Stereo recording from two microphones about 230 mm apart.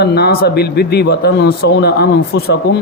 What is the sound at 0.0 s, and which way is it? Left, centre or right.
Speech, left.